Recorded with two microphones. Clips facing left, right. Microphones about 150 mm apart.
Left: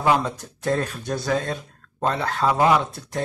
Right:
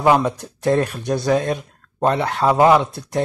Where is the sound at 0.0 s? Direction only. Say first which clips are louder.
Right 5 dB; 20° right (ahead or behind).